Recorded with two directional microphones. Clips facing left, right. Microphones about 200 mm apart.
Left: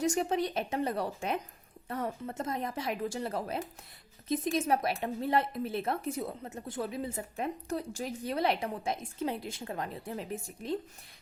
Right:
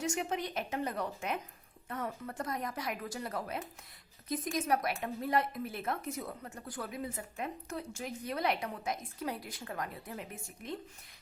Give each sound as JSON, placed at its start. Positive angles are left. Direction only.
{"t": 0.0, "sound": "a woman's voice", "side_deg": 35}